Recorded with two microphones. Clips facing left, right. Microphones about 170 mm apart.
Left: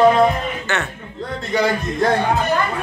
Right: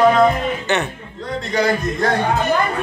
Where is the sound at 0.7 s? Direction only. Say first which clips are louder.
Right 4 dB; 20° right (ahead or behind).